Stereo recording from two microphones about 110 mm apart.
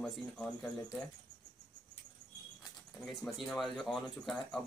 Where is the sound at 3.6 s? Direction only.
Centre (ahead or behind).